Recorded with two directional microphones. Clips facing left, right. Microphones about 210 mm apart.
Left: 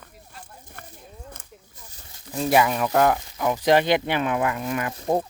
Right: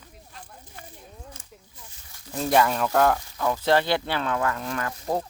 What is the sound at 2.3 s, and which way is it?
Speech, 5° left (ahead or behind).